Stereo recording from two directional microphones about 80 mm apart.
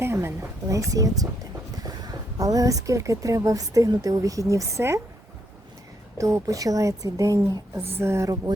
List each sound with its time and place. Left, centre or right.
0.0 s a woman's voice: right
0.9 s speech: right
6.1 s speech: right
7.9 s a woman's voice: right